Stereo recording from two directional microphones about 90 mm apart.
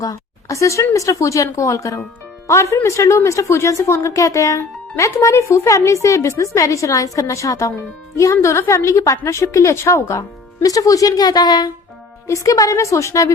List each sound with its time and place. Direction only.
0.0 s a woman's voice: 40° left (ahead or behind)
12.3 s speech: 40° left (ahead or behind)